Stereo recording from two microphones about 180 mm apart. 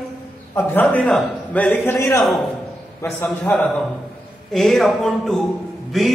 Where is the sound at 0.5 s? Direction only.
10° left (ahead or behind).